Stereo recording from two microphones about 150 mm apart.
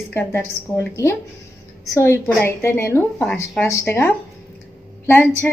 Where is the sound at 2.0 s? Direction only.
15° left (ahead or behind).